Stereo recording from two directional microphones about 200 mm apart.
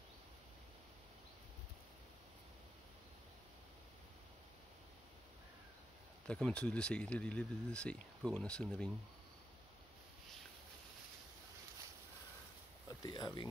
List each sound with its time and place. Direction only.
6.2 s speech: 5° left (ahead or behind)
13.0 s speech: 20° left (ahead or behind)